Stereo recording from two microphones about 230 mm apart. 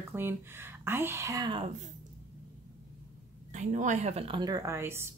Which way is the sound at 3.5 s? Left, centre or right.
Right.